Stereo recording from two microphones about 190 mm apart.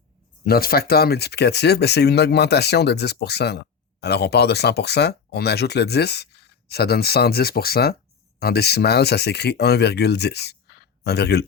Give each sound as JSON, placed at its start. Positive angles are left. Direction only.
{"t": 0.4, "sound": "speech", "side_deg": 50}